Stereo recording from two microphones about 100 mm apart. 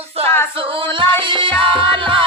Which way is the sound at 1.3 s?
60° right (ahead or behind).